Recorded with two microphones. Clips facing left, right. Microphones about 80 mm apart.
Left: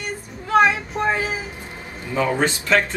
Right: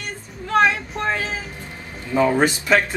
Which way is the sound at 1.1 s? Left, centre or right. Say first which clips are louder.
Left 2 dB; centre.